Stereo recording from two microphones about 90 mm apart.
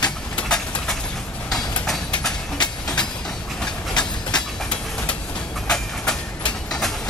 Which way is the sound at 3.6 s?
10° left (ahead or behind).